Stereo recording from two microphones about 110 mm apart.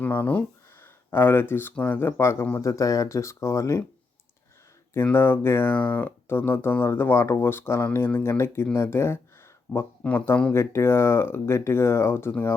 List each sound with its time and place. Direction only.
0.0 s speech: 15° left (ahead or behind)
4.9 s speech: 20° left (ahead or behind)